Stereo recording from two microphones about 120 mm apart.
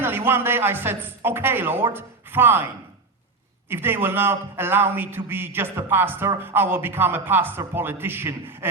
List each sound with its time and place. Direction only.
0.0 s a man's voice: 20° right (ahead or behind)
3.7 s a man's voice: 20° right (ahead or behind)